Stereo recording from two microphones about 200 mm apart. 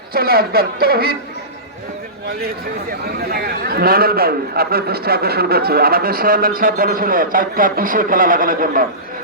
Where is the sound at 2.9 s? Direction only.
50° right (ahead or behind).